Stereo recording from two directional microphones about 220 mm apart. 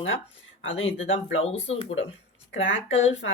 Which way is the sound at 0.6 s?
60° left (ahead or behind).